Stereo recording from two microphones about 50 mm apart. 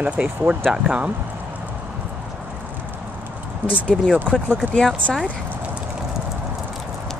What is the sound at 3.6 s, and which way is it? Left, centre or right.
Speech, right.